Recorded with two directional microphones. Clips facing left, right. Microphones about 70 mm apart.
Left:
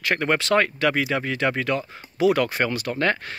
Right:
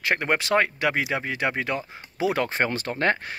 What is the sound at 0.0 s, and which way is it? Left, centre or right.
Speech, right.